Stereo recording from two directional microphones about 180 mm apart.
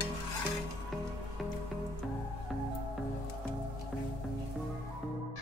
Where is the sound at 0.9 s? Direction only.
Centre (ahead or behind).